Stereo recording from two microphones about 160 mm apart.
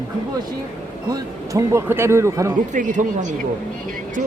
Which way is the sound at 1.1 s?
20° right (ahead or behind).